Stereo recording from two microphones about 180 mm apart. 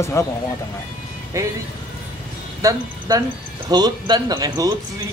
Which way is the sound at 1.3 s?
15° right (ahead or behind).